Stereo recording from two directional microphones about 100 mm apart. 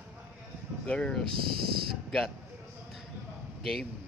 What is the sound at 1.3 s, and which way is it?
Speech, 60° right (ahead or behind).